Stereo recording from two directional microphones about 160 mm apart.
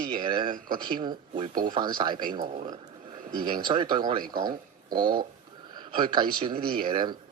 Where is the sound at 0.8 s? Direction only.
30° right (ahead or behind).